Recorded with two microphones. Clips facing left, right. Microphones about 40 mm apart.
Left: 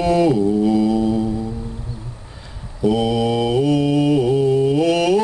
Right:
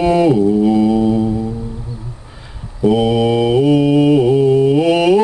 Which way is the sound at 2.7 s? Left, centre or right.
Centre.